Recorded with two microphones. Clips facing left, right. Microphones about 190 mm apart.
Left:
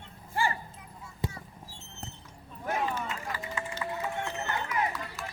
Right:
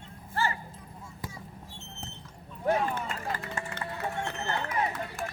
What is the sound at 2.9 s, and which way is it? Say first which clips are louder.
Run: right 1 dB; 50° right (ahead or behind).